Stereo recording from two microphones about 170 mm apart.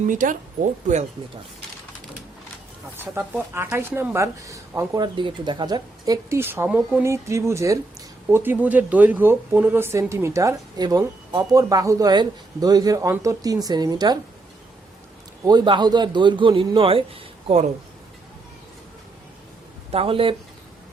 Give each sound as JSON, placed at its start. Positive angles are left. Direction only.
{"t": 0.1, "sound": "speech", "side_deg": -50}
{"t": 3.0, "sound": "speech", "side_deg": -10}
{"t": 5.1, "sound": "speech", "side_deg": -30}
{"t": 15.4, "sound": "speech", "side_deg": -25}
{"t": 19.9, "sound": "speech", "side_deg": -35}